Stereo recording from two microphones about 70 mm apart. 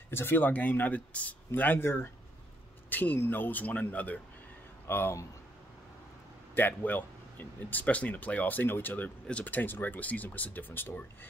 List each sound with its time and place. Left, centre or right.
0.1 s speech: left
4.8 s speech: left
6.5 s speech: left